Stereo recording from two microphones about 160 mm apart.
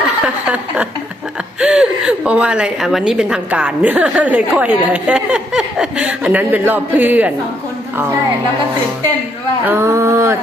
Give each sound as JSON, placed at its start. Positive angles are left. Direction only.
{"t": 0.4, "sound": "a woman's voice", "side_deg": -10}
{"t": 9.6, "sound": "a woman's voice", "side_deg": -15}